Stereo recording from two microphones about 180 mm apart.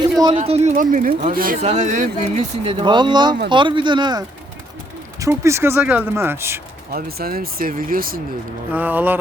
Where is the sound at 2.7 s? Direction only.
30° right (ahead or behind).